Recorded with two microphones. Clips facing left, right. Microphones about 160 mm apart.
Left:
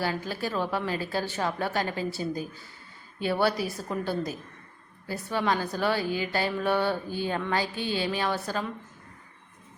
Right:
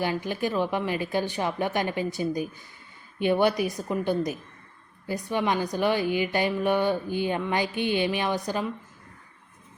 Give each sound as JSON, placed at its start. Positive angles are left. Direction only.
{"t": 0.0, "sound": "a woman's voice", "side_deg": -15}